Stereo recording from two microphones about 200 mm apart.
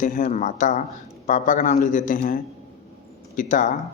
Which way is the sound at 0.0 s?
40° left (ahead or behind).